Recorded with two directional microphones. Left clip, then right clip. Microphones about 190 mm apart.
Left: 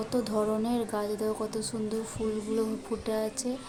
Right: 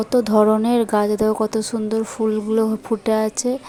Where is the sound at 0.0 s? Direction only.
35° right (ahead or behind).